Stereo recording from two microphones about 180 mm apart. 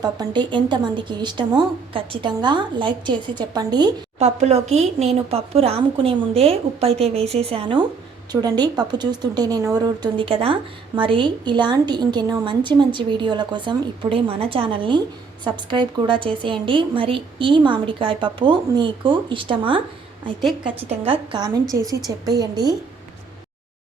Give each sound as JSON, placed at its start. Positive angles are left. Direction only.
{"t": 0.0, "sound": "a woman's voice", "side_deg": -25}
{"t": 4.2, "sound": "a woman's voice", "side_deg": -40}
{"t": 21.0, "sound": "a woman's voice", "side_deg": -25}